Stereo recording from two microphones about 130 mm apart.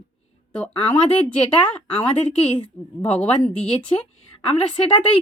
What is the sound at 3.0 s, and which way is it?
Speech, 10° left (ahead or behind).